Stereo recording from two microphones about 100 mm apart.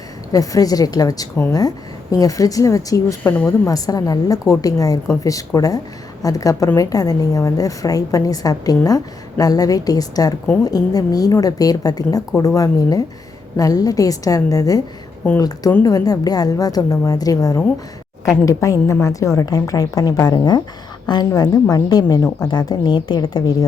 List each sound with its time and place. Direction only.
0.3 s a woman's voice: 35° left (ahead or behind)
3.2 s a woman's voice: 20° left (ahead or behind)
3.7 s a woman's voice: 40° left (ahead or behind)